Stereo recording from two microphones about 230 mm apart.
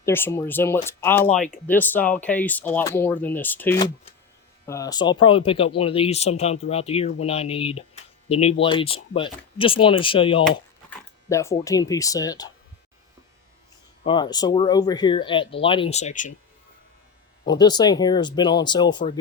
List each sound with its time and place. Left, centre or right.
0.0 s speech: centre
14.0 s speech: left
17.4 s speech: centre